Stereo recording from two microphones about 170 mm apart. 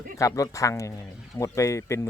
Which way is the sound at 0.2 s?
20° left (ahead or behind).